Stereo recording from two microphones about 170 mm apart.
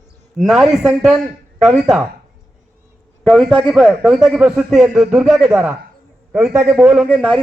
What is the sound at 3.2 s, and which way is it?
A man's voice, centre (ahead or behind).